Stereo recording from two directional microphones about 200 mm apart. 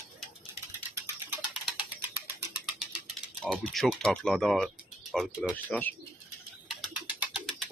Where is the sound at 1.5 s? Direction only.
5° right (ahead or behind).